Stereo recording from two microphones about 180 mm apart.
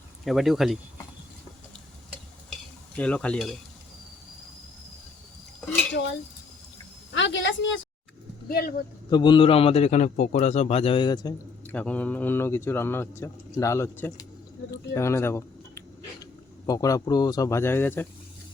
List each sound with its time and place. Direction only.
0.3 s speech: centre (ahead or behind)
2.5 s stir: 5° left (ahead or behind)
5.9 s speech: 80° left
7.1 s a woman's voice: 90° left
8.4 s speech: 55° left (ahead or behind)
9.0 s a man's voice: 25° left (ahead or behind)
11.6 s a man's voice: 5° left (ahead or behind)